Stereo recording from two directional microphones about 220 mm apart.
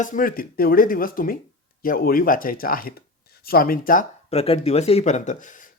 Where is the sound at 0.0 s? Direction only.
35° left (ahead or behind).